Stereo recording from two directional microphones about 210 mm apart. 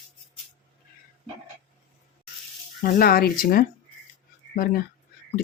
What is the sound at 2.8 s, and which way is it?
Speech, 45° left (ahead or behind).